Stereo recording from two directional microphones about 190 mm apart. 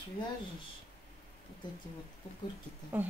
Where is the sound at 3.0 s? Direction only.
10° right (ahead or behind).